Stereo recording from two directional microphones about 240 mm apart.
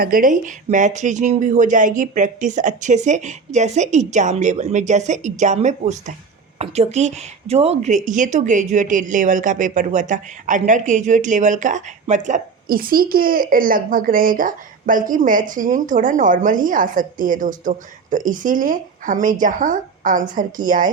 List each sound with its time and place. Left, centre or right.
0.0 s a woman's voice: right